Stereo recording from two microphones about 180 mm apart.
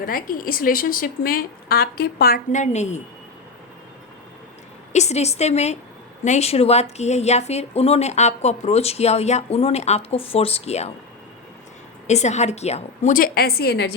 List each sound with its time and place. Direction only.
0.0 s a woman's voice: 50° left (ahead or behind)
4.9 s speech: 40° left (ahead or behind)
12.0 s speech: 40° left (ahead or behind); by 13.9 s 65° left (ahead or behind)